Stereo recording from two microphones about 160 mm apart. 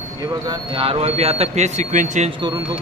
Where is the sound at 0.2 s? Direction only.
25° right (ahead or behind); by 2.3 s 50° right (ahead or behind).